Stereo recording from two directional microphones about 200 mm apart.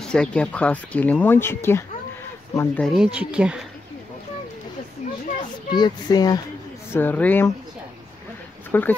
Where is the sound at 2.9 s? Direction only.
5° right (ahead or behind).